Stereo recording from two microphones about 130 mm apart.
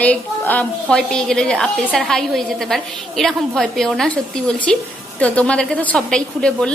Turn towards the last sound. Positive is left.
turn(degrees=5)  # may be behind; listen again after turning